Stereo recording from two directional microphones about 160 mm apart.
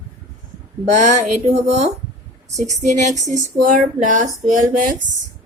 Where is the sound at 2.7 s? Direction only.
45° right (ahead or behind).